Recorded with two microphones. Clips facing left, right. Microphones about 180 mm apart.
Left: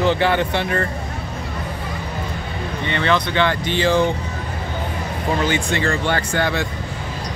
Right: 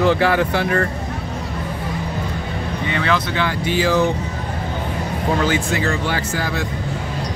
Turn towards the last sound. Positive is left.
turn(degrees=0)  # may be behind; listen again after turning